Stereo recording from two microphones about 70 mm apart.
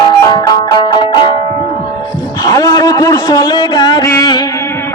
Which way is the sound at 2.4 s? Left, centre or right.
Left.